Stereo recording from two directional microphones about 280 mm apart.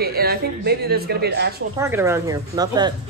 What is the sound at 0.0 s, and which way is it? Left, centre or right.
Speech, right.